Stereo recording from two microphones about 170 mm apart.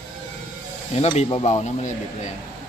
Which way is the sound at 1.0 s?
35° left (ahead or behind).